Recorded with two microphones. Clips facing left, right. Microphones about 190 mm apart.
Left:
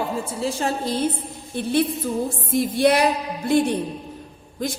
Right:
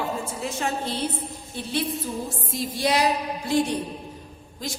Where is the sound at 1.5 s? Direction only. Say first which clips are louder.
Left 7 dB; 55° left (ahead or behind).